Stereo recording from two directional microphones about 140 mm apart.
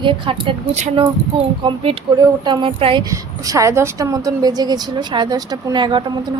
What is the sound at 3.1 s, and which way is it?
A woman's voice, 20° right (ahead or behind).